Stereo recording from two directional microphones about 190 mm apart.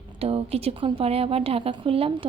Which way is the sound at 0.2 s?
30° right (ahead or behind).